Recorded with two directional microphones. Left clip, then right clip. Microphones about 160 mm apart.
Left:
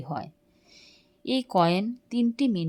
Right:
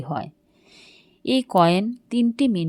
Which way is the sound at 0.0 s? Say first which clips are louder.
Right 5 dB; 20° right (ahead or behind).